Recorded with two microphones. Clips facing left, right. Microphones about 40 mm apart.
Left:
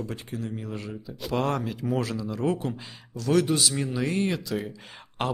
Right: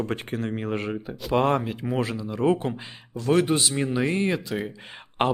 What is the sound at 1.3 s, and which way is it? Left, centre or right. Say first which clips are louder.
Speech: right 5 dB; right.